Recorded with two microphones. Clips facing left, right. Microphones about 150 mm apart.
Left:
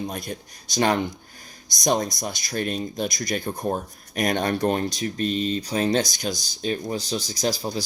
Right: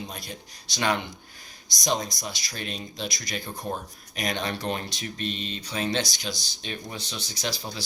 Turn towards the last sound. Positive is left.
turn(degrees=40)  # may be behind; listen again after turning